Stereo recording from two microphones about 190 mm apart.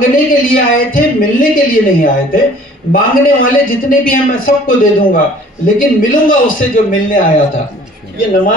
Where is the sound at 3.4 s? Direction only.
45° left (ahead or behind).